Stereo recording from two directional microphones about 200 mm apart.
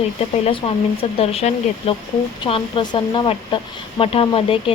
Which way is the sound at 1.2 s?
30° left (ahead or behind).